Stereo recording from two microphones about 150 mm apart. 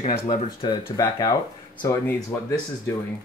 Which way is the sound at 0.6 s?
30° left (ahead or behind).